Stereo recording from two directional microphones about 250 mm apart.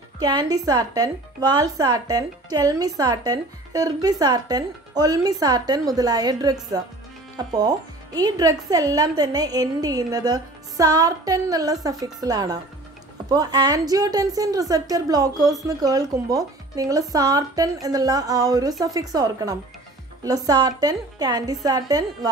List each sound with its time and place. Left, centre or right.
0.2 s speech: centre